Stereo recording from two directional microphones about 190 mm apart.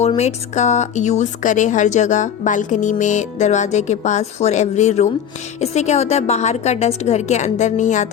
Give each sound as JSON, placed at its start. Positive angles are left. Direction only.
{"t": 0.2, "sound": "speech", "side_deg": 35}